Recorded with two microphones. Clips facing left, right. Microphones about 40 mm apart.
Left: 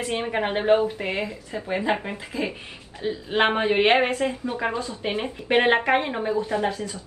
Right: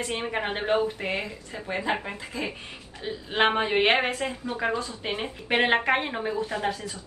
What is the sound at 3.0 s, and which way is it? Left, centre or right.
A woman's voice, centre.